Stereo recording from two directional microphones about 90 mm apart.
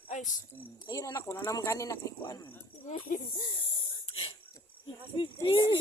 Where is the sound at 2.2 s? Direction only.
50° left (ahead or behind).